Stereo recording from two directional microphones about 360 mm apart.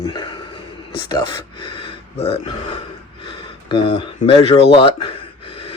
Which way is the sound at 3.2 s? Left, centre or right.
Centre.